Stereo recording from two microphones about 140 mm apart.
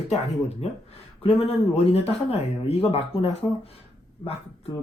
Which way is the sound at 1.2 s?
45° left (ahead or behind).